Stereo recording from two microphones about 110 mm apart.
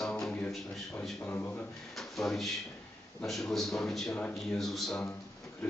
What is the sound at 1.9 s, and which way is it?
A man's voice, centre (ahead or behind).